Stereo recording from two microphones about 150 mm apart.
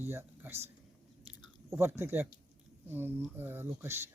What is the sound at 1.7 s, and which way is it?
Speech, 20° right (ahead or behind).